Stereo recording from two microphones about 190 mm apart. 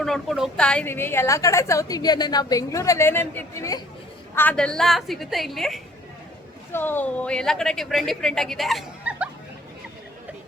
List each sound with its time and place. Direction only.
0.0 s a woman's voice: centre (ahead or behind); by 3.8 s 15° left (ahead or behind)
4.4 s speech: 5° left (ahead or behind)